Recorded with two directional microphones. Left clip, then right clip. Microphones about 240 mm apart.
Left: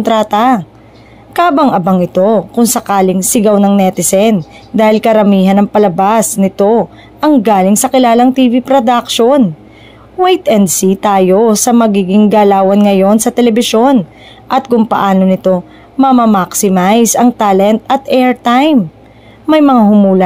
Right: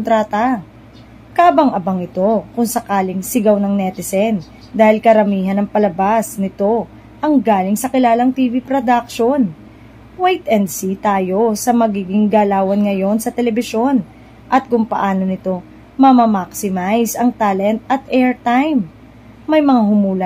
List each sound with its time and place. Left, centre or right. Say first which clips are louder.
0.0 s a woman's voice: left 5 dB; left